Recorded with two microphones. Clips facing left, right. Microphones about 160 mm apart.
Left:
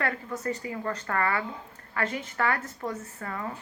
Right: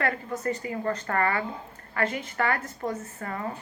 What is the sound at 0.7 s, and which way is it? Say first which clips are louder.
Speech: right 3 dB; 40° right (ahead or behind).